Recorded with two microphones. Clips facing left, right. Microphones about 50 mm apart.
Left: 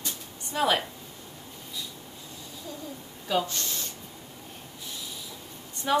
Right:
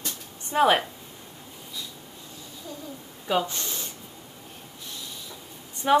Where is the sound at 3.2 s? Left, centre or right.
Right.